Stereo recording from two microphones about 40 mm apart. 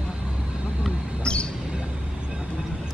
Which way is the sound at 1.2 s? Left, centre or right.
Left.